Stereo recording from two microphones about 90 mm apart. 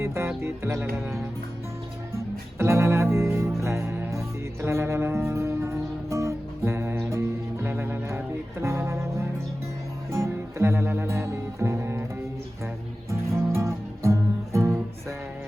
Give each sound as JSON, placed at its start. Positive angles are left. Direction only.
{"t": 0.0, "sound": "music", "side_deg": -25}
{"t": 13.1, "sound": "music", "side_deg": -35}